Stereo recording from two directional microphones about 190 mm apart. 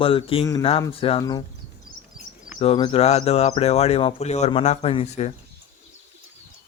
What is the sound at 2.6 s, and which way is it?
Speech, 25° left (ahead or behind).